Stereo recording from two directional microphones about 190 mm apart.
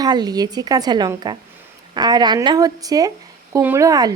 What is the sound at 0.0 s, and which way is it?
Speech, 20° right (ahead or behind).